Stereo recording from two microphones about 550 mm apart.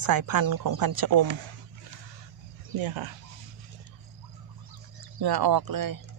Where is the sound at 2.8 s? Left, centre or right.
Right.